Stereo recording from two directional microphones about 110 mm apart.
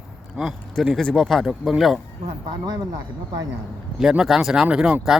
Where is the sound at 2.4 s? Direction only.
40° right (ahead or behind).